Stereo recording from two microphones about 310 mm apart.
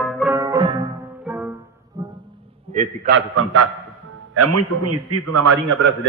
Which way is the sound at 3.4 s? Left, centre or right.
Right.